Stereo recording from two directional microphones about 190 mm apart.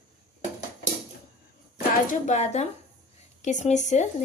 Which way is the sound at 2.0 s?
40° left (ahead or behind).